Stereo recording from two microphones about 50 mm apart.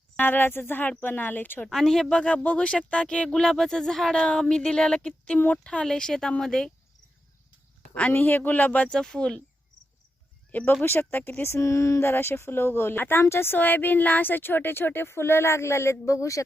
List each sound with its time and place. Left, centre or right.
0.2 s speech: left
1.7 s speech: centre
2.1 s speech: left
5.2 s speech: left; by 6.7 s centre
8.1 s speech: left
8.9 s speech: centre
10.7 s speech: left
11.5 s speech: left
12.0 s speech: left
13.2 s speech: left